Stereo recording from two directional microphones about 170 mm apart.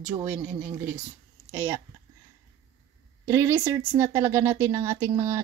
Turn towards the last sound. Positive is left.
turn(degrees=-15)  # may be behind; listen again after turning